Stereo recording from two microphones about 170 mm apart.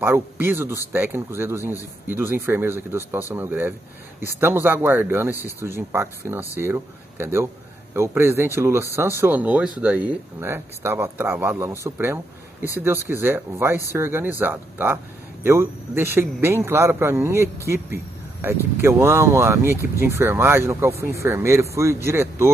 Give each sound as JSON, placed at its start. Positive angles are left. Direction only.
{"t": 0.0, "sound": "speech", "side_deg": -15}